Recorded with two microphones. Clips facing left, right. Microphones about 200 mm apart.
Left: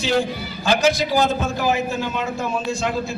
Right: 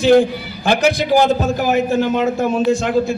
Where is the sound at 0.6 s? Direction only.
60° right (ahead or behind).